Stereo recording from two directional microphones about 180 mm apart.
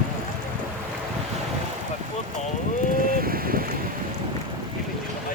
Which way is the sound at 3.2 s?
55° right (ahead or behind).